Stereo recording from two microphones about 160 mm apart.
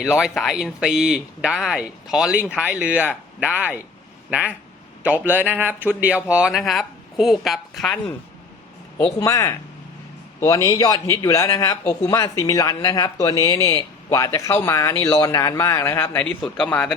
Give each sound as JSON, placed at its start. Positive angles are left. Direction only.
{"t": 0.0, "sound": "speech", "side_deg": -5}
{"t": 9.2, "sound": "speech", "side_deg": 20}